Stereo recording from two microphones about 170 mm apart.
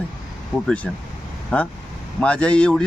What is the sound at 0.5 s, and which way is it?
Speech, 5° left (ahead or behind).